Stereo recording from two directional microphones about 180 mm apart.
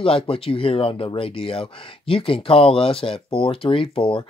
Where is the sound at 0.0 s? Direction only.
30° left (ahead or behind).